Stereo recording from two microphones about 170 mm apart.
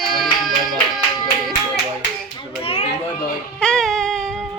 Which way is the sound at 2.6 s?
35° left (ahead or behind).